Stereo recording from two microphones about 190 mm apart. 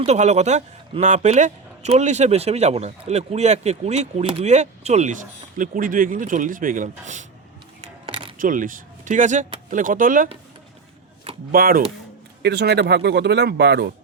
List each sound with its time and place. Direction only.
0.0 s speech: 35° right (ahead or behind)
8.0 s a sound: 30° right (ahead or behind)
8.4 s speech: 45° right (ahead or behind)
11.5 s speech: 50° right (ahead or behind)